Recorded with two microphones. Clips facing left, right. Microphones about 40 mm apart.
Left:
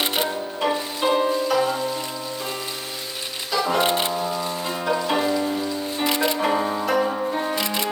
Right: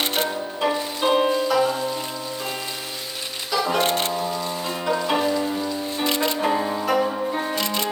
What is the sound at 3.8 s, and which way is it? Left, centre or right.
Music, left.